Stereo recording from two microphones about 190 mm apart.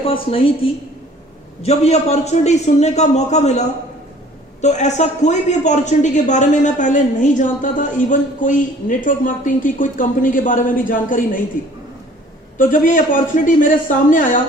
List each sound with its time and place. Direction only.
0.0 s a woman's voice: 30° left (ahead or behind); by 11.4 s 45° left (ahead or behind)
12.5 s speech: 45° left (ahead or behind)